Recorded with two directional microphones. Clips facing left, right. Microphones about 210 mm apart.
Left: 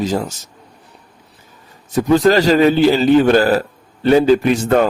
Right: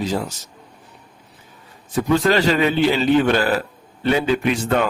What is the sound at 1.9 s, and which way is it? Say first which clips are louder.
A man's voice: left 5 dB; 40° left (ahead or behind).